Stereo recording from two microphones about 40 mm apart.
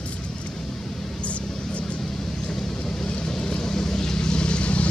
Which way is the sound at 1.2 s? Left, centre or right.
Left.